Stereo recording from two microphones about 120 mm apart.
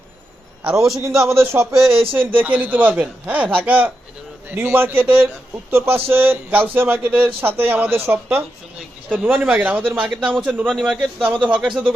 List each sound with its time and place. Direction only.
0.6 s a man's voice: 5° right (ahead or behind)
1.3 s speech: 25° right (ahead or behind)
1.9 s speech: 50° right (ahead or behind)
2.1 s a man's voice: 15° right (ahead or behind)